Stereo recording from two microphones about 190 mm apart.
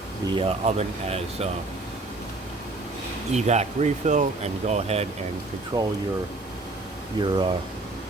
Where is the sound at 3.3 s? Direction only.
35° right (ahead or behind).